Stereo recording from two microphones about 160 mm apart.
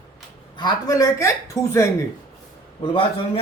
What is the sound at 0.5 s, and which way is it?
Speech, 25° left (ahead or behind).